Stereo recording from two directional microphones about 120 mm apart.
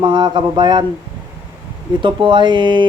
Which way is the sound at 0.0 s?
40° right (ahead or behind).